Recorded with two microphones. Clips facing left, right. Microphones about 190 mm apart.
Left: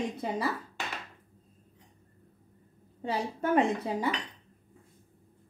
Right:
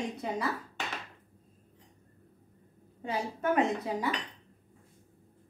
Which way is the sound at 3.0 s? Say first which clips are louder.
Left 1 dB; 30° left (ahead or behind).